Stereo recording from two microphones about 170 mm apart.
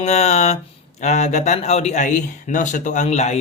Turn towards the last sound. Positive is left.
turn(degrees=40)  # may be behind; listen again after turning